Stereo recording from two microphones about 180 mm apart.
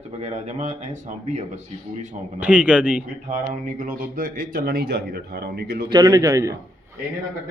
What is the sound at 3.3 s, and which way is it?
Speech, 45° right (ahead or behind).